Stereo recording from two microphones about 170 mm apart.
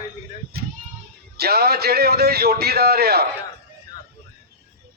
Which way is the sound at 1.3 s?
70° right (ahead or behind).